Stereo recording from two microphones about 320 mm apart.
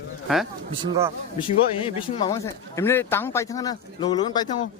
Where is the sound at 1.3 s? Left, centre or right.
Centre.